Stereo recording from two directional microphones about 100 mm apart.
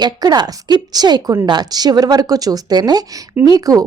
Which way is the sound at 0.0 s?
40° right (ahead or behind).